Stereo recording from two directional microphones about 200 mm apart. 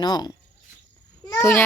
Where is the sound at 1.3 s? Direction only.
10° left (ahead or behind).